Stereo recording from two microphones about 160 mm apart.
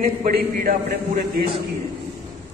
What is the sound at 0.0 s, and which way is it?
A man's voice, 60° right (ahead or behind).